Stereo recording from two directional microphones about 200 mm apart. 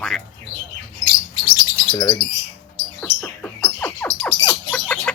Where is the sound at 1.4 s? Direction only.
20° left (ahead or behind).